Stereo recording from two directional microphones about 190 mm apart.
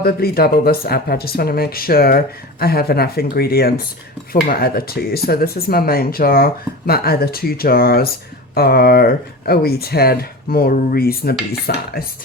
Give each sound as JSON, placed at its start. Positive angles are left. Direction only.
{"t": 0.0, "sound": "speech", "side_deg": 55}